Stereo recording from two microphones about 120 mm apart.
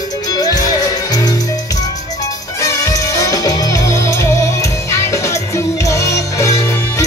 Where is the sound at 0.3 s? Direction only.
30° left (ahead or behind).